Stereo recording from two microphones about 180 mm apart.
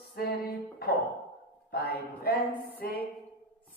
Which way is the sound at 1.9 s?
60° left (ahead or behind).